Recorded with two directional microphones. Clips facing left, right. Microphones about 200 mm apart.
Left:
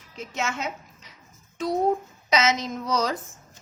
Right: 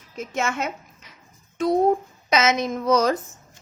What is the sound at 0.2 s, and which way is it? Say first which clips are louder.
Speech: right 4 dB; 50° right (ahead or behind).